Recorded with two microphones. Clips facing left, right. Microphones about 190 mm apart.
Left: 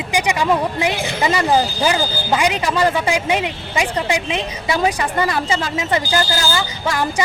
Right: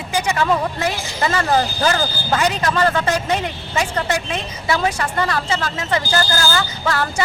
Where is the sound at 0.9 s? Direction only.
60° left (ahead or behind).